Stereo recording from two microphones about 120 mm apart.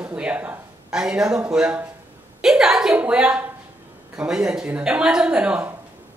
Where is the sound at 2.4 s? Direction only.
5° right (ahead or behind).